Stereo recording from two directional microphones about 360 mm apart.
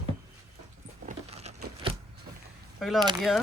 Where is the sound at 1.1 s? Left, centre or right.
Centre.